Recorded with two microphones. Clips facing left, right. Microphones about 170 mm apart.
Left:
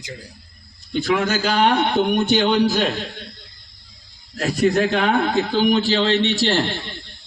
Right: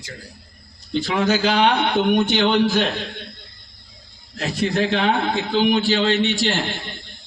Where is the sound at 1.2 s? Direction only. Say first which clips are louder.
Right 5 dB; 45° left (ahead or behind).